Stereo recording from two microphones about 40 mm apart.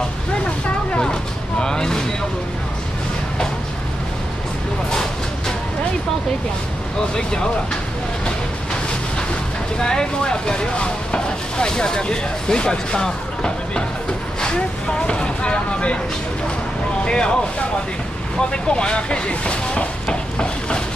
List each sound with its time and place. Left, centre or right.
1.6 s speech: centre
9.8 s speech: centre
17.0 s speech: left
18.5 s speech: left